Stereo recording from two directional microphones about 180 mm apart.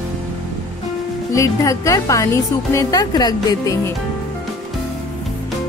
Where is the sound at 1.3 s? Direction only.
15° left (ahead or behind).